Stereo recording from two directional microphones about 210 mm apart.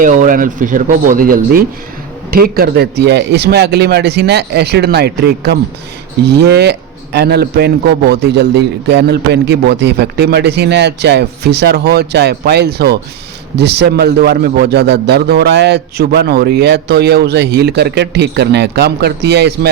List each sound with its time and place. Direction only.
0.0 s a man's voice: 40° right (ahead or behind)